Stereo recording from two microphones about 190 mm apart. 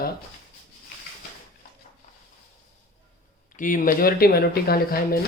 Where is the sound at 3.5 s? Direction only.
45° left (ahead or behind).